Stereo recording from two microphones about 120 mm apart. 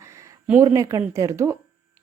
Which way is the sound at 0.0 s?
25° right (ahead or behind).